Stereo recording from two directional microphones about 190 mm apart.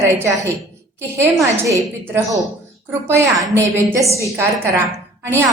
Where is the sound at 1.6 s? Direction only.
15° right (ahead or behind).